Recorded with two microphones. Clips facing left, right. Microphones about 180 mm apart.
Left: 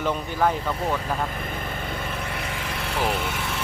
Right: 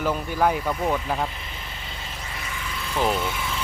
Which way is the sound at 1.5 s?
55° left (ahead or behind).